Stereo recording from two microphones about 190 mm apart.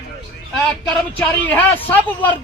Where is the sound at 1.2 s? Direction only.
10° left (ahead or behind).